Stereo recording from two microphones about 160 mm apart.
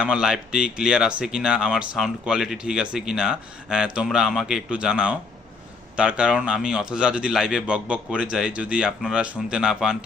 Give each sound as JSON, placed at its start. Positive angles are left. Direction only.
{"t": 0.0, "sound": "speech", "side_deg": -5}